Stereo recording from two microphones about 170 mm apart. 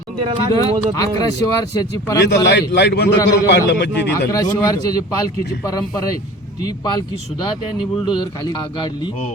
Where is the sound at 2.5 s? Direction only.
80° left.